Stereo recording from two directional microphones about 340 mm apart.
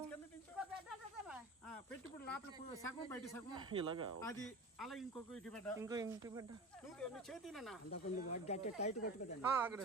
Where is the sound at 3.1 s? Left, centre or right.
Centre.